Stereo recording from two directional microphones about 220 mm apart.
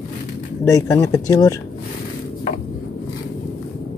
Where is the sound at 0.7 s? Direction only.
15° left (ahead or behind).